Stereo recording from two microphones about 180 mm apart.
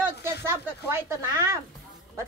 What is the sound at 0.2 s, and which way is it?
A woman's voice, 15° right (ahead or behind).